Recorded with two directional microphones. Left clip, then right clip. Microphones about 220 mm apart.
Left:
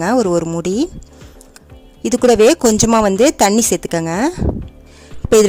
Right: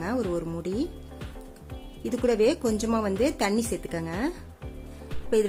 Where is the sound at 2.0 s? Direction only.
45° left (ahead or behind).